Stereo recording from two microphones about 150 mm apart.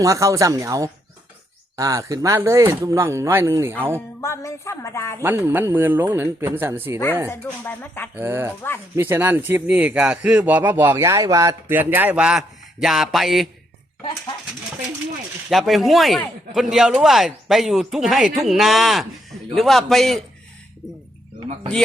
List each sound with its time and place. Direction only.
0.0 s speech: 20° right (ahead or behind)
4.2 s speech: 20° left (ahead or behind)
5.2 s speech: 15° right (ahead or behind)
7.3 s speech: 15° left (ahead or behind)
8.1 s speech: 15° right (ahead or behind); by 13.5 s centre (ahead or behind)
15.4 s speech: centre (ahead or behind)